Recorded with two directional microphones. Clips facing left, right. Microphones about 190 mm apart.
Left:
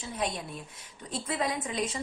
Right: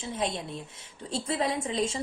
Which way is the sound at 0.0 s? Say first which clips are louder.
Right 2 dB; 25° right (ahead or behind).